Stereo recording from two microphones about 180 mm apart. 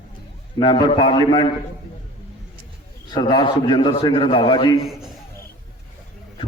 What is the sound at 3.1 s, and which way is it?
A man's voice, 25° left (ahead or behind).